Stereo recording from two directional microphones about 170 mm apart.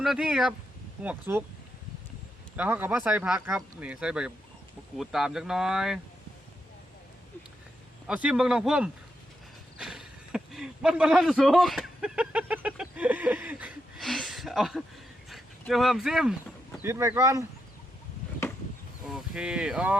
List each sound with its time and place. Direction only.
0.0 s speech: 5° right (ahead or behind)
2.6 s speech: 10° right (ahead or behind)
8.0 s speech: 5° right (ahead or behind)
9.7 s a sound: 5° right (ahead or behind)
15.3 s speech: centre (ahead or behind)
16.8 s speech: 15° right (ahead or behind)
19.0 s speech: 5° right (ahead or behind)